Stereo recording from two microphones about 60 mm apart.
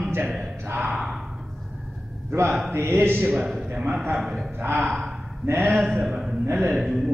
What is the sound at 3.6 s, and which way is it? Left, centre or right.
Speech, right.